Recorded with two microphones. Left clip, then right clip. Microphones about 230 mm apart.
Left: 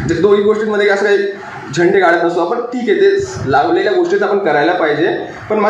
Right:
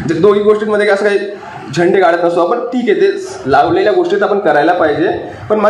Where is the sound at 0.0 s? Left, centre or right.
Right.